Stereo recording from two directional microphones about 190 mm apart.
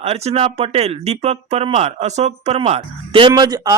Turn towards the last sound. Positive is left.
turn(degrees=-20)  # may be behind; listen again after turning